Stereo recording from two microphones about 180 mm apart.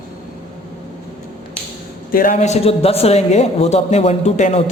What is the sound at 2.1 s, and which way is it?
A man's voice, 45° left (ahead or behind).